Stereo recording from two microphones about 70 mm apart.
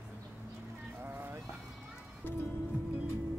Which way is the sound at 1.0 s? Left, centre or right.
Right.